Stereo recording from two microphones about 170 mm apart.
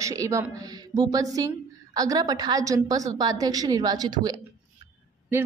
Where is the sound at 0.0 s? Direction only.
20° right (ahead or behind).